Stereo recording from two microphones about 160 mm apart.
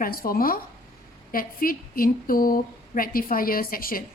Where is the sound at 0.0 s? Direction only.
65° left (ahead or behind).